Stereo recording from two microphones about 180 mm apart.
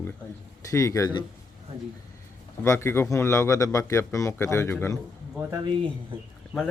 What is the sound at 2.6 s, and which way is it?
Speech, 15° left (ahead or behind).